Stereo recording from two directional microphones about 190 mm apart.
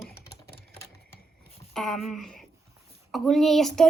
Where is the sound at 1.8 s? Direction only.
Centre (ahead or behind).